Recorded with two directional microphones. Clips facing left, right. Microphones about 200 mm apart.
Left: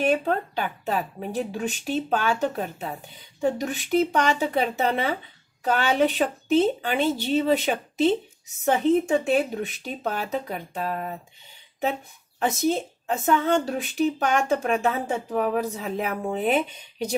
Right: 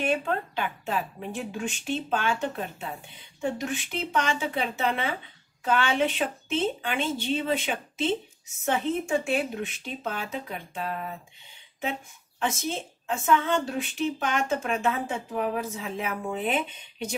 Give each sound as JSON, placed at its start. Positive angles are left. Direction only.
{"t": 0.0, "sound": "a woman's voice", "side_deg": 40}